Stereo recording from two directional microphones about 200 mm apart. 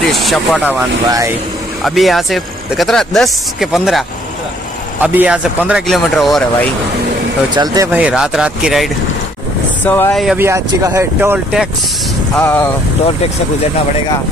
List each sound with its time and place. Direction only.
0.1 s speech: centre (ahead or behind)
1.0 s speech: 15° right (ahead or behind)
1.8 s speech: centre (ahead or behind)
5.0 s speech: 5° right (ahead or behind)
7.5 s speech: 20° right (ahead or behind)
7.9 s speech: 5° right (ahead or behind)
9.8 s speech: 10° left (ahead or behind)
10.1 s speech: centre (ahead or behind)
10.4 s speech: 15° right (ahead or behind)
12.4 s speech: 10° left (ahead or behind)